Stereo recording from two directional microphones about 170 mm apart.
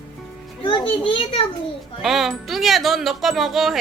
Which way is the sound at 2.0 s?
Centre (ahead or behind).